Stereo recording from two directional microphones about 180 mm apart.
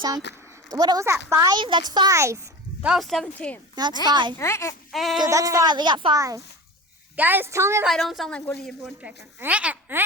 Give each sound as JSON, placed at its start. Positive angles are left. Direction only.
{"t": 0.3, "sound": "speech", "side_deg": 70}
{"t": 0.7, "sound": "speech", "side_deg": -20}
{"t": 2.9, "sound": "speech", "side_deg": 0}
{"t": 4.0, "sound": "speech", "side_deg": -25}
{"t": 4.4, "sound": "speech", "side_deg": 15}
{"t": 4.9, "sound": "speech", "side_deg": 0}
{"t": 5.2, "sound": "a woman's voice", "side_deg": -20}
{"t": 7.9, "sound": "speech", "side_deg": 0}
{"t": 8.6, "sound": "speech", "side_deg": -5}